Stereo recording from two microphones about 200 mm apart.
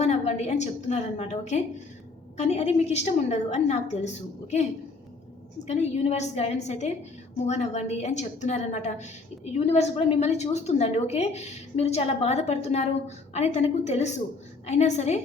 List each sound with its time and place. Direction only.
0.0 s a woman's voice: 35° left (ahead or behind)
5.6 s a woman's voice: 35° left (ahead or behind)